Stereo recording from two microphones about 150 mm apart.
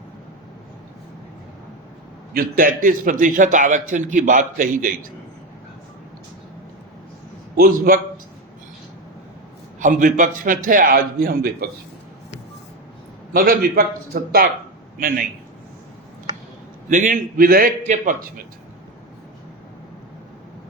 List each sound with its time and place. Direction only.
2.3 s a man's voice: 70° right (ahead or behind)
7.5 s a man's voice: 80° right
9.8 s a man's voice: 60° right (ahead or behind)
13.3 s a man's voice: 75° right (ahead or behind)
14.9 s a man's voice: 70° right (ahead or behind)
16.9 s a man's voice: 55° right (ahead or behind); by 17.7 s 80° right
17.8 s a man's voice: 60° right (ahead or behind)